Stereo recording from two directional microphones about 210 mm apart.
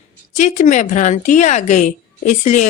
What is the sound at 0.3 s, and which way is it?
Speech, 35° left (ahead or behind).